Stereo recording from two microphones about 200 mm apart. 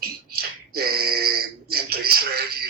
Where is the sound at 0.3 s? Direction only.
50° right (ahead or behind).